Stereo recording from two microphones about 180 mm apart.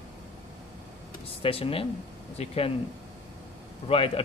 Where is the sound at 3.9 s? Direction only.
35° left (ahead or behind).